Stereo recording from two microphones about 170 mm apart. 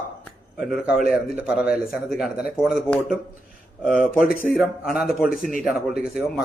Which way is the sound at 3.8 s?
5° right (ahead or behind).